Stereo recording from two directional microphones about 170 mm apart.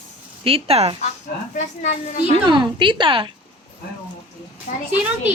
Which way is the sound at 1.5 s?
45° left (ahead or behind).